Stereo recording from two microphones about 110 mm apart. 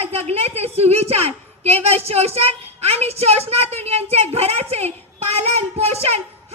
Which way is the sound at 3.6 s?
70° right (ahead or behind).